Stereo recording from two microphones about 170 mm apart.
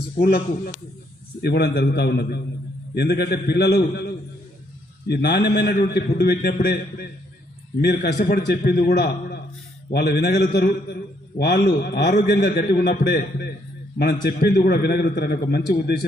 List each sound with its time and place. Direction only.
0.2 s speech: 60° left (ahead or behind)
1.4 s a man's voice: 70° left (ahead or behind)